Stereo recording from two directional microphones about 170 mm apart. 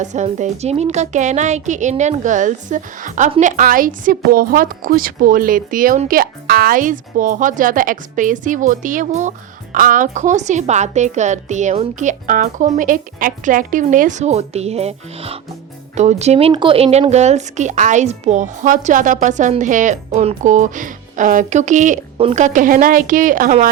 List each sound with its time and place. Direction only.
0.0 s a woman's voice: 45° right (ahead or behind)